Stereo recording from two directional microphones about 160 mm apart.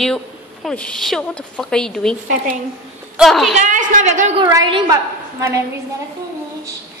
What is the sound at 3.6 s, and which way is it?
Speech, 55° right (ahead or behind).